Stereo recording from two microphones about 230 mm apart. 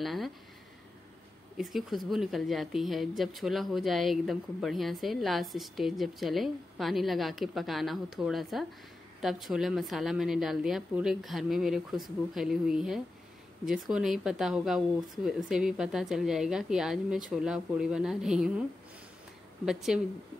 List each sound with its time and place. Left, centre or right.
0.0 s a woman's voice: centre
1.6 s a woman's voice: centre